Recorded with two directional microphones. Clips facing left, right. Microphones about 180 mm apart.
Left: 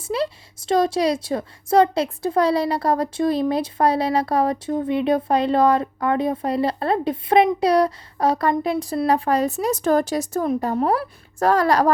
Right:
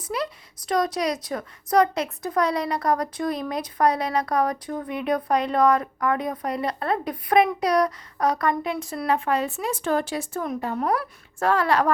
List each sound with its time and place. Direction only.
0.0 s a woman's voice: 30° left (ahead or behind)